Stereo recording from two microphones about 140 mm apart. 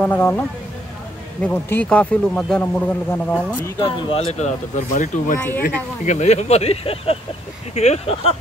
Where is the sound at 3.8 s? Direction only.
40° left (ahead or behind).